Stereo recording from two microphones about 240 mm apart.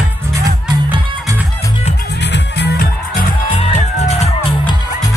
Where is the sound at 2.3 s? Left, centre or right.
Left.